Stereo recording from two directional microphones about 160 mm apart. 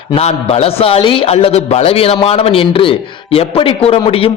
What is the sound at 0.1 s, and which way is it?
A man's voice, 40° left (ahead or behind).